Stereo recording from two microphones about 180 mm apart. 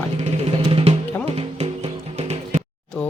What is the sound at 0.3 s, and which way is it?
Music, 30° right (ahead or behind).